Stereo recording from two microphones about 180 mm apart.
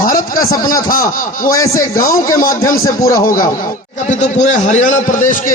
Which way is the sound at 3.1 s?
50° left (ahead or behind).